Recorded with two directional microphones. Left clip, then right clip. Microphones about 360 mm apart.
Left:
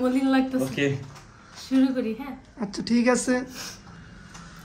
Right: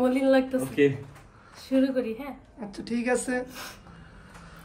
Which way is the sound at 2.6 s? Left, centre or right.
Centre.